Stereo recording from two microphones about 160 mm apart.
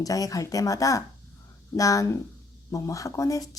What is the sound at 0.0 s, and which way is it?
Speech, 20° left (ahead or behind).